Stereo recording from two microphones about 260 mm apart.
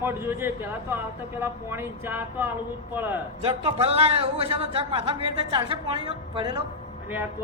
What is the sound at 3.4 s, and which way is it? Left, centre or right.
A man's voice, right.